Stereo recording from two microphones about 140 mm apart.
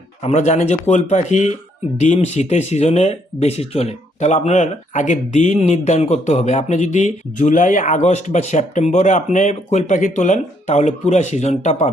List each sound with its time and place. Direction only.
0.2 s speech: 55° left (ahead or behind)